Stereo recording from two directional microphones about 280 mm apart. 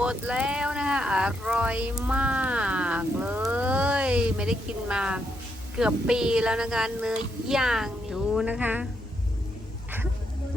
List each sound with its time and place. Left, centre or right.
0.0 s speech: centre